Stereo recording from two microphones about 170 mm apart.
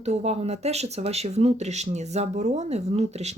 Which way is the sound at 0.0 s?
40° right (ahead or behind).